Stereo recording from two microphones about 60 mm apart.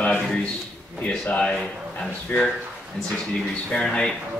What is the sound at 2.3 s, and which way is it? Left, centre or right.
Speech, left.